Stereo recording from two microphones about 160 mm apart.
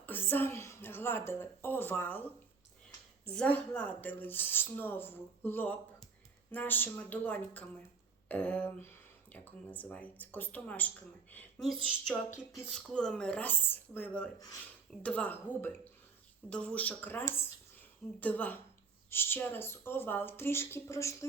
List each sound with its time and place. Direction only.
0.0 s a woman's voice: 10° left (ahead or behind)
3.3 s speech: 5° left (ahead or behind)
12.3 s speech: 20° left (ahead or behind)
12.7 s speech: 5° left (ahead or behind)